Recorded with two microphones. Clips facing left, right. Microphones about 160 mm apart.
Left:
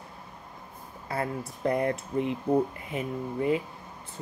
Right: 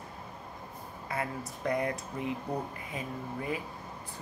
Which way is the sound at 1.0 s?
30° left (ahead or behind).